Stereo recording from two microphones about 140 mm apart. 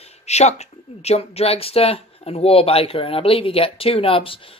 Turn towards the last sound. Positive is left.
turn(degrees=40)  # may be behind; listen again after turning